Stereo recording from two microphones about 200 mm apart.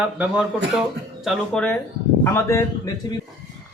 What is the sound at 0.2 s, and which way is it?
A man's voice, 5° right (ahead or behind).